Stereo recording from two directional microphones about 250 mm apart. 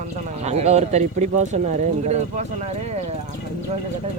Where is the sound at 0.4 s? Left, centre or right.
Right.